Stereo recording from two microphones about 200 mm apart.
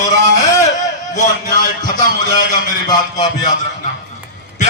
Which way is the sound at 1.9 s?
40° left (ahead or behind).